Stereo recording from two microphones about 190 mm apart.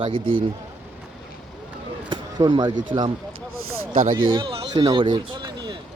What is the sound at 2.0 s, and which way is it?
Speech, 25° right (ahead or behind).